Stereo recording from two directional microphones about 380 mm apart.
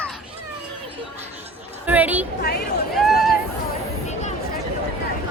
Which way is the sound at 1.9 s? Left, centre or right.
Centre.